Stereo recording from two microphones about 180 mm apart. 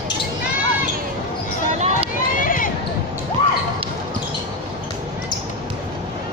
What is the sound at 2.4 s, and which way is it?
Basketball bounce, 50° left (ahead or behind).